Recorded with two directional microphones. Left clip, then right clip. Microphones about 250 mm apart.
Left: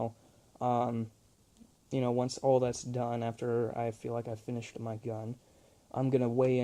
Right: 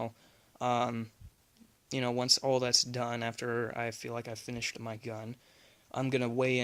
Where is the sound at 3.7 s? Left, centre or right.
Centre.